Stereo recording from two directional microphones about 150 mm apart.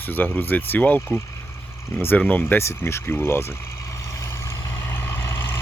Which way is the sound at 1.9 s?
10° left (ahead or behind).